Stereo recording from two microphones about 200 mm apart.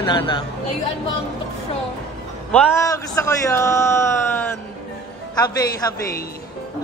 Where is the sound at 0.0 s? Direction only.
25° left (ahead or behind).